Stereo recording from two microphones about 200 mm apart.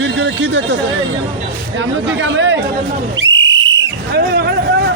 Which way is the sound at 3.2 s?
70° right (ahead or behind).